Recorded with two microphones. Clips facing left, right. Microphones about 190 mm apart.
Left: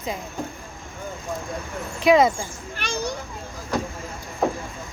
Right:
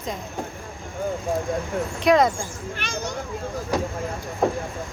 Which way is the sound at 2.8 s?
35° left (ahead or behind).